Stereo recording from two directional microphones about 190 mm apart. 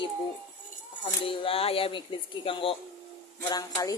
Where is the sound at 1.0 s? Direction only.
25° left (ahead or behind).